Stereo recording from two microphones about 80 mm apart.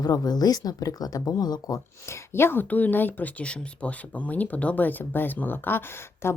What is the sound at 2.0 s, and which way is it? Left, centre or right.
Speech, left.